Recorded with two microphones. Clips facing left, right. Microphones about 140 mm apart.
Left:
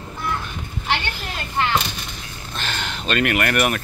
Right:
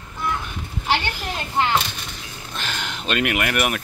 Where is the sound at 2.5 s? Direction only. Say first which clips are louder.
Left 1 dB; 10° right (ahead or behind).